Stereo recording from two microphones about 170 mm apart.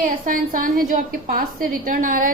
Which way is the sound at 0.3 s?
55° right (ahead or behind).